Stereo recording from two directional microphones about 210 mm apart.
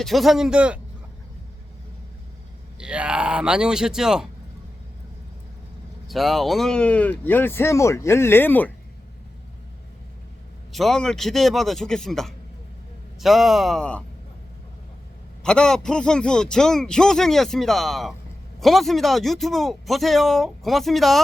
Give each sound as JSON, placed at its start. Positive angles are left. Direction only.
{"t": 0.0, "sound": "speech", "side_deg": 0}
{"t": 2.7, "sound": "speech", "side_deg": -5}
{"t": 6.1, "sound": "speech", "side_deg": 0}
{"t": 10.7, "sound": "speech", "side_deg": 0}
{"t": 15.4, "sound": "speech", "side_deg": 5}